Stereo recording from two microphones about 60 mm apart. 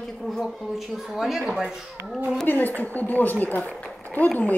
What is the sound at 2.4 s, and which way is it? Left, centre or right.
A woman's voice, left.